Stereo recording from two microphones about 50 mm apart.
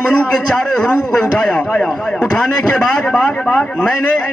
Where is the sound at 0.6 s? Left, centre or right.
Centre.